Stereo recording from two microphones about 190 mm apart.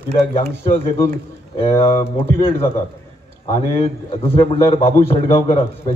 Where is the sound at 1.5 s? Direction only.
30° left (ahead or behind).